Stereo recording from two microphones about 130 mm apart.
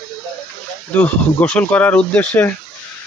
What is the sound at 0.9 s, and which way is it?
Speech, 10° left (ahead or behind).